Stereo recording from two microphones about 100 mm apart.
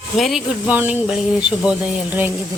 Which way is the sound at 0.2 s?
Centre (ahead or behind).